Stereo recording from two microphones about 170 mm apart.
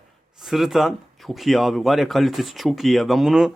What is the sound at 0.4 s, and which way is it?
Speech, centre (ahead or behind).